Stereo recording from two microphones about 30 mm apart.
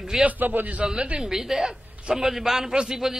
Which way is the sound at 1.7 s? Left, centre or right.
Right.